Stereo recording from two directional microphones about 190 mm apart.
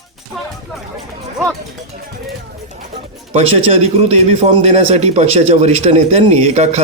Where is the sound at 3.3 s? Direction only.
30° right (ahead or behind).